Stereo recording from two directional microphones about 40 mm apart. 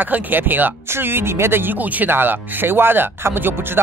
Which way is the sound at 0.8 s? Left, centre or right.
Right.